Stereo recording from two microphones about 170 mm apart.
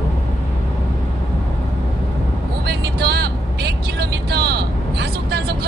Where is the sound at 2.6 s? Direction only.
70° right (ahead or behind).